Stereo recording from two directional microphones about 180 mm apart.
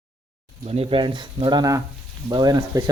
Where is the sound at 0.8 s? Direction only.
30° right (ahead or behind).